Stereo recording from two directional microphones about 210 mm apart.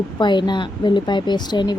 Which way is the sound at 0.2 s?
20° left (ahead or behind).